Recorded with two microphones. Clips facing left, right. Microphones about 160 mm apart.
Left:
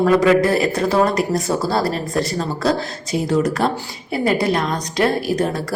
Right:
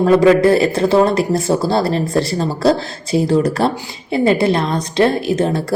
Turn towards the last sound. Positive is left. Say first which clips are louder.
# right 3 dB
turn(degrees=-25)  # may be behind; listen again after turning